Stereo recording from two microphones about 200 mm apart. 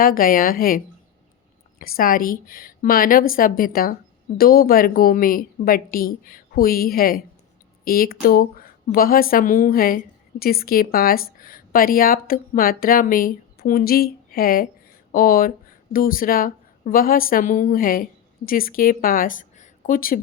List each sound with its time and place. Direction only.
0.0 s a woman's voice: 45° left (ahead or behind)
1.8 s a woman's voice: 45° left (ahead or behind)